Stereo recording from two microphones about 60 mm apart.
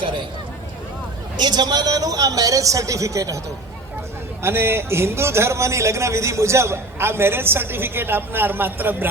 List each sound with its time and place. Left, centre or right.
1.6 s a man's voice: right
4.4 s a man's voice: right